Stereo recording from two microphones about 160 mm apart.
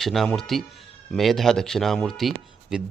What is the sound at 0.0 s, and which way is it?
Speech, centre (ahead or behind).